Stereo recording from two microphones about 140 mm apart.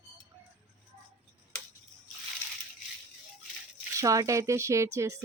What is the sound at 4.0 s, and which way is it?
Speech, 25° right (ahead or behind).